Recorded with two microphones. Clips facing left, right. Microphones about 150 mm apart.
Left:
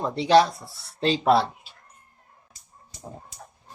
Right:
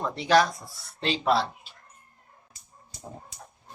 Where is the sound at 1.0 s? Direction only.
45° left (ahead or behind).